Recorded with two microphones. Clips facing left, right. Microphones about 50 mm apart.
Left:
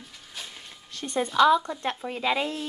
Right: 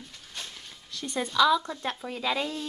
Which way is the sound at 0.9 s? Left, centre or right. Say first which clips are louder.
Left 1 dB; left.